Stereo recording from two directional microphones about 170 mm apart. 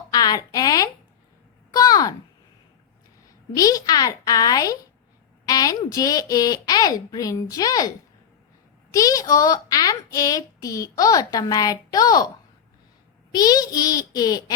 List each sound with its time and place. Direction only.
0.1 s a sound: 20° left (ahead or behind)
3.5 s a woman's voice: 20° left (ahead or behind)
13.3 s a woman's voice: 20° left (ahead or behind)